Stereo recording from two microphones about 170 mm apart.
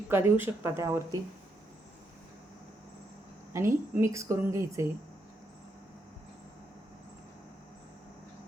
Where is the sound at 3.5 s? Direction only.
15° right (ahead or behind).